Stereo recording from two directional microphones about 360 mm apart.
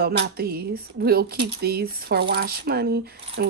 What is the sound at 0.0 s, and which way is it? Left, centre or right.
Speech, right.